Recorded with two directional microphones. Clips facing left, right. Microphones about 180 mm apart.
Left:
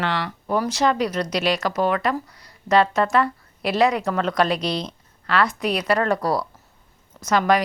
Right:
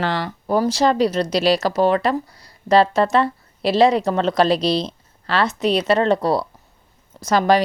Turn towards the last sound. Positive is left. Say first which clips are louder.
# right 3 dB
turn(degrees=-30)  # may be behind; listen again after turning